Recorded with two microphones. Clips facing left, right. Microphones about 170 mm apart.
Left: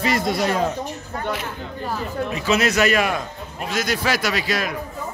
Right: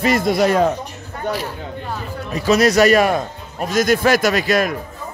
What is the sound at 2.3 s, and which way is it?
A man's voice, 40° right (ahead or behind).